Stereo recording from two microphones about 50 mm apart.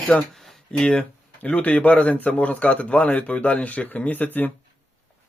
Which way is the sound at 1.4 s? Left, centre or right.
Left.